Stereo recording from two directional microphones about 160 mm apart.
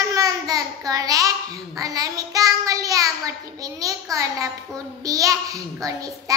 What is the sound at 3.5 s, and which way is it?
Speech, 20° right (ahead or behind).